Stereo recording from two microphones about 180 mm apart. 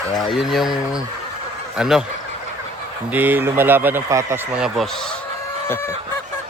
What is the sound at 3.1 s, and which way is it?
Speech, 10° right (ahead or behind).